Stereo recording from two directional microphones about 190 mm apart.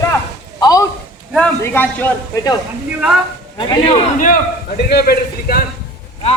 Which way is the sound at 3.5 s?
25° left (ahead or behind).